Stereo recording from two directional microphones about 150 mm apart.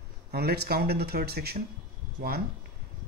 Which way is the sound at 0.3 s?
90° right.